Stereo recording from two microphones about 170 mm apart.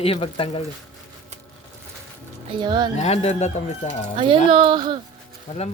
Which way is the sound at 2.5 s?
25° right (ahead or behind).